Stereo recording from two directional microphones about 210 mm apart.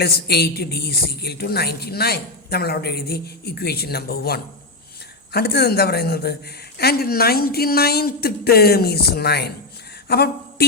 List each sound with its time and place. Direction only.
0.0 s a woman's voice: 50° left (ahead or behind)